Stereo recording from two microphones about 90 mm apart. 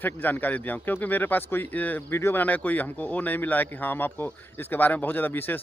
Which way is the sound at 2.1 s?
30° left (ahead or behind).